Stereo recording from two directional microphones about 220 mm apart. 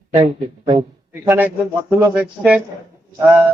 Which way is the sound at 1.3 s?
5° right (ahead or behind).